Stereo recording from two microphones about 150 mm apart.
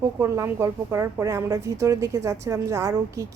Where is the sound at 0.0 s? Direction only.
15° right (ahead or behind).